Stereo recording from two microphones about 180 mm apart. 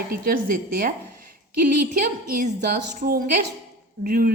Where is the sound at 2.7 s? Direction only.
55° right (ahead or behind).